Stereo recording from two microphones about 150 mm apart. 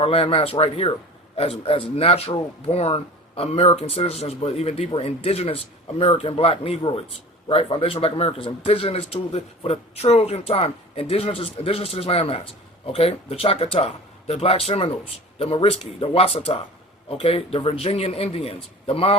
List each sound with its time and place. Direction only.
0.0 s speech: 40° left (ahead or behind)